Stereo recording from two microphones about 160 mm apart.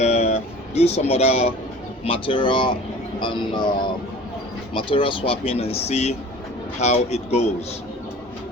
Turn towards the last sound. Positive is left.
turn(degrees=40)  # may be behind; listen again after turning